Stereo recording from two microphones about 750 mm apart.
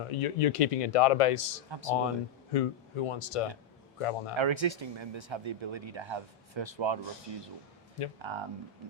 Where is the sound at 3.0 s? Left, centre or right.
Left.